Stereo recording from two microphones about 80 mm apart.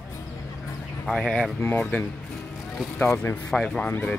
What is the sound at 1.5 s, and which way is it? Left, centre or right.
Speech, centre.